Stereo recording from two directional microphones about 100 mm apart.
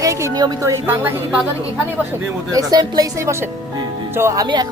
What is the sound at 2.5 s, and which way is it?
A woman's voice, 40° right (ahead or behind).